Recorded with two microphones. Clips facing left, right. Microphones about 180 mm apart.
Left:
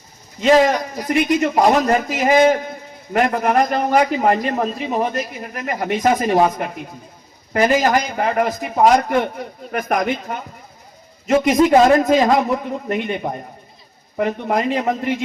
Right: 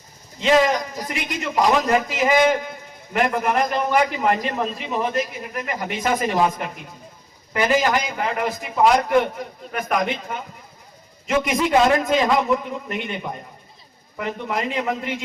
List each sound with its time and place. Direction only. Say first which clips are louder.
0.4 s a man's voice: left 4 dB; 45° left (ahead or behind)